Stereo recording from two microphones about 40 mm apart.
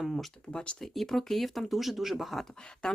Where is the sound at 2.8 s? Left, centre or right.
Centre.